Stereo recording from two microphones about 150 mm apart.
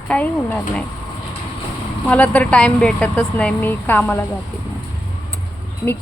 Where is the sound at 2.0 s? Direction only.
10° left (ahead or behind).